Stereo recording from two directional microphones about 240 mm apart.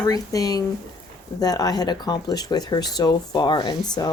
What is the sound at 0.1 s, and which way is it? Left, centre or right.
Speech, centre.